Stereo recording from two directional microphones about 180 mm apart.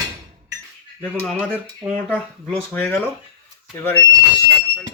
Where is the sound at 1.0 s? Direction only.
5° left (ahead or behind).